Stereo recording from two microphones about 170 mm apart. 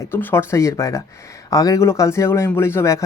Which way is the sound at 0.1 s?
10° left (ahead or behind).